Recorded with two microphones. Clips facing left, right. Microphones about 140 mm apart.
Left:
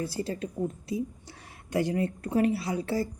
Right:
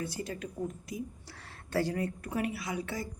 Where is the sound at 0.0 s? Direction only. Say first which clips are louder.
Left 5 dB; 30° left (ahead or behind).